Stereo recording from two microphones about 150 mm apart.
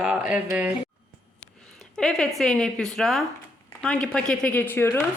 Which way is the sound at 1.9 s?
5° left (ahead or behind).